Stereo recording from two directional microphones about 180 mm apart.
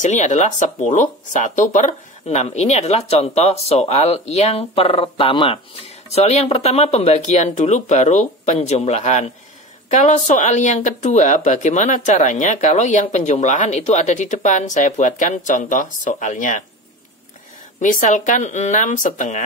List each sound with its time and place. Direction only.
0.0 s speech: 40° left (ahead or behind)
17.7 s speech: 45° left (ahead or behind)